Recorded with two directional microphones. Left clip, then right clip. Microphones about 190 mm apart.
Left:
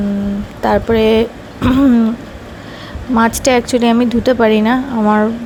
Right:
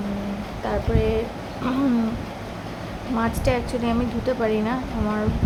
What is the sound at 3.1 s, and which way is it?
Speech, 45° left (ahead or behind).